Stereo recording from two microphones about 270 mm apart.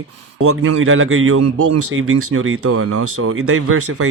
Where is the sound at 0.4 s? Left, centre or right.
Right.